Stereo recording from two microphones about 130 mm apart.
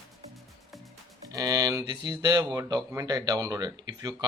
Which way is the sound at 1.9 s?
30° right (ahead or behind).